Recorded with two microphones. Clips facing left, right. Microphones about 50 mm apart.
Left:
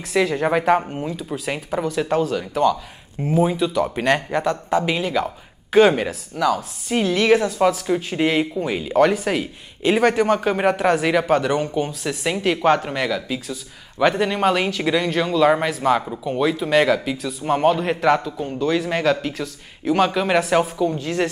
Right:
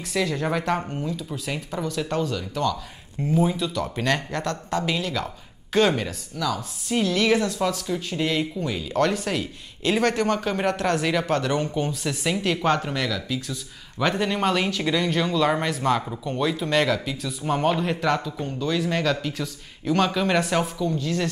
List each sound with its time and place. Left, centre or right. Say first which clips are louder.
0.1 s speech: left 6 dB; centre
1.9 s speech: left 5 dB; centre
7.8 s speech: left 6 dB; left
8.9 s speech: left 6 dB; centre
21.0 s speech: left 4 dB; left